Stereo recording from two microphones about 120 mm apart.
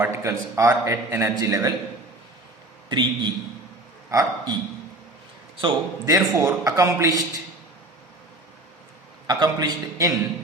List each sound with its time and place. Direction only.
0.0 s a man's voice: 25° right (ahead or behind)
2.9 s a man's voice: 40° right (ahead or behind)
6.1 s a man's voice: 30° right (ahead or behind)
9.2 s a man's voice: 35° right (ahead or behind)